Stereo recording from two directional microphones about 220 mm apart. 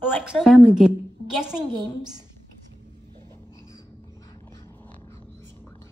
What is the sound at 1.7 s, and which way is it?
Speech, 20° right (ahead or behind).